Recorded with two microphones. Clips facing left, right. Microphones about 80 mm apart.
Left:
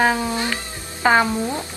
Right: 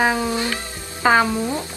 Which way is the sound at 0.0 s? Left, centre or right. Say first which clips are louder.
Even; centre.